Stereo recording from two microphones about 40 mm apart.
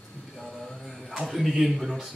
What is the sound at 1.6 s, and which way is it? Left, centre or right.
Speech, centre.